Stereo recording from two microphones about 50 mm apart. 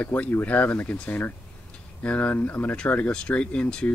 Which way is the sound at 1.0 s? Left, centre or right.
Left.